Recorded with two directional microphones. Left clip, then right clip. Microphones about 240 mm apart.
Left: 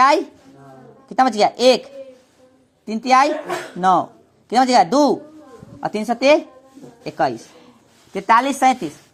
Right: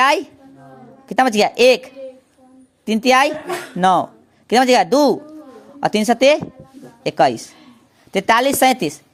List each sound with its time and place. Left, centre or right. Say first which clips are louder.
0.0 s a woman's voice: left 1 dB; right